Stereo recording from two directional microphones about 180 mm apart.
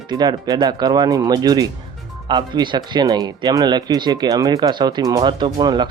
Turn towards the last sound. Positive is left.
turn(degrees=-25)  # may be behind; listen again after turning